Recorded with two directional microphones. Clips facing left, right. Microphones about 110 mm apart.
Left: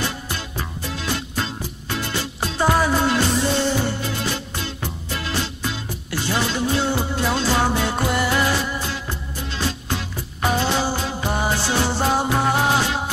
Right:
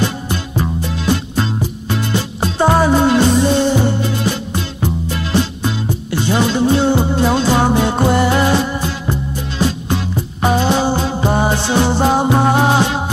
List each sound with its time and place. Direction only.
0.0 s music: 20° right (ahead or behind)